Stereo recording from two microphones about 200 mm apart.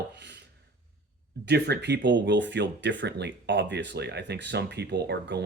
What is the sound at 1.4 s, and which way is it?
Speech, 55° right (ahead or behind).